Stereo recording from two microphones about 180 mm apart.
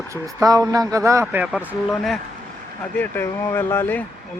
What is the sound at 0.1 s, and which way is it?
Speech, 20° right (ahead or behind).